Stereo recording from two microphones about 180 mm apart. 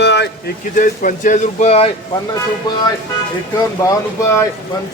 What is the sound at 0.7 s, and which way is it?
Speech, 45° left (ahead or behind).